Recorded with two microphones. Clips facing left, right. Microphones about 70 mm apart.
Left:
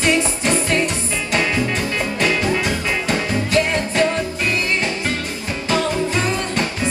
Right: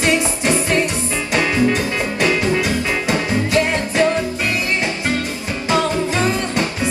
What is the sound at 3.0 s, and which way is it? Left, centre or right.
Music, centre.